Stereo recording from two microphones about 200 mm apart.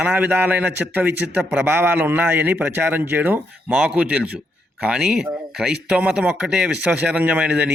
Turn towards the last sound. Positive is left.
turn(degrees=-5)  # may be behind; listen again after turning